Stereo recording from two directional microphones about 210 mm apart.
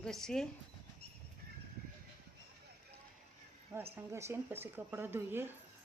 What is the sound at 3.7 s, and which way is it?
Speech, 10° right (ahead or behind).